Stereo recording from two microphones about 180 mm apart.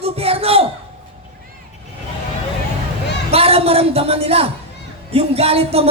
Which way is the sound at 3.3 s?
35° right (ahead or behind).